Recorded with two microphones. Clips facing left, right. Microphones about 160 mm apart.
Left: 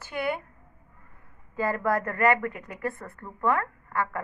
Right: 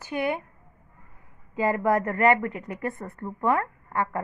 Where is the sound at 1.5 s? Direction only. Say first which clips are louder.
Right 3 dB; 20° right (ahead or behind).